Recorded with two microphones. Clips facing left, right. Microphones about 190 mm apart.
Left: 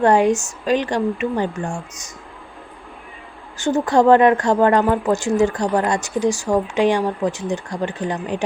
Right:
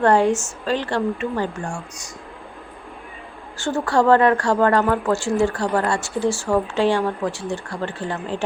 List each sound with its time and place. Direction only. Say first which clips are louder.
0.0 s speech: left 2 dB; 15° left (ahead or behind)
3.6 s speech: left 3 dB; 20° left (ahead or behind)